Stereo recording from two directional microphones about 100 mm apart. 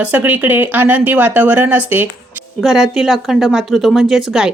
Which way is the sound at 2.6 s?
5° right (ahead or behind).